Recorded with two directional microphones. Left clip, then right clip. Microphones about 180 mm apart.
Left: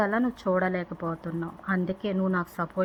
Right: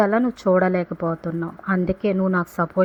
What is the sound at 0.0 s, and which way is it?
Speech, 40° right (ahead or behind).